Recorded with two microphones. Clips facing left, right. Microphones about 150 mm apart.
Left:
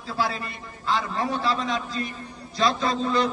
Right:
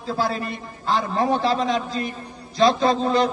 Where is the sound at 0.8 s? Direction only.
35° right (ahead or behind).